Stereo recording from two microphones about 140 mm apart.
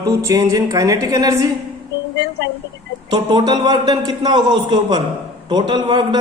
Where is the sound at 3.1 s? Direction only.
30° right (ahead or behind).